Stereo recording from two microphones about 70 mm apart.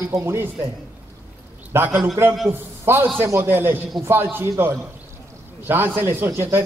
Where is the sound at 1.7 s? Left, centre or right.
Right.